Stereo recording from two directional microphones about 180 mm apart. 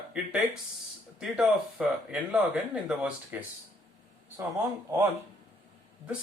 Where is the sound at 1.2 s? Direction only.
Centre (ahead or behind).